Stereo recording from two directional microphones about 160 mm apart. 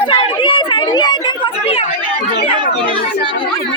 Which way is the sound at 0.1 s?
30° left (ahead or behind).